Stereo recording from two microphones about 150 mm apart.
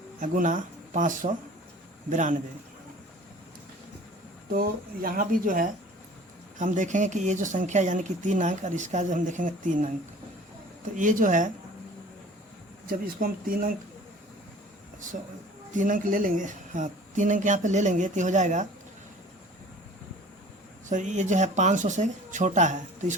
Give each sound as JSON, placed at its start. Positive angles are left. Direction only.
{"t": 0.2, "sound": "speech", "side_deg": -60}
{"t": 4.5, "sound": "speech", "side_deg": -70}
{"t": 10.9, "sound": "speech", "side_deg": -60}
{"t": 12.9, "sound": "speech", "side_deg": -75}
{"t": 15.7, "sound": "speech", "side_deg": -60}
{"t": 20.9, "sound": "speech", "side_deg": -55}